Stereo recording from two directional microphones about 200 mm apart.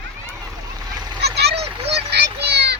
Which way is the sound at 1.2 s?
55° right (ahead or behind).